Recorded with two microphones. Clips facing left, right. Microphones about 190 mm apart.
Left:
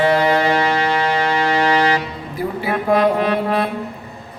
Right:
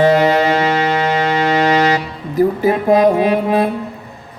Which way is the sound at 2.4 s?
45° right (ahead or behind).